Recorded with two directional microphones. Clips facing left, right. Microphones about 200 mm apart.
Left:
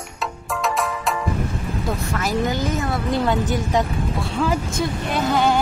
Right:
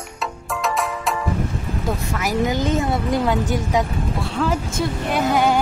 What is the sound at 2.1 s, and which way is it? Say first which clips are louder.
Speech: right 1 dB; 10° right (ahead or behind).